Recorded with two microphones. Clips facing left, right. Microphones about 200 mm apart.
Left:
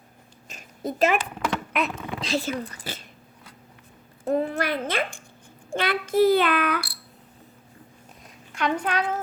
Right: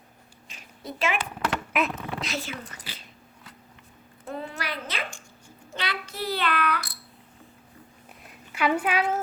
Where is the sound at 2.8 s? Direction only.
45° left (ahead or behind).